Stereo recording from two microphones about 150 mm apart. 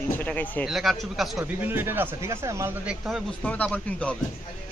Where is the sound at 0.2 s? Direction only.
10° left (ahead or behind).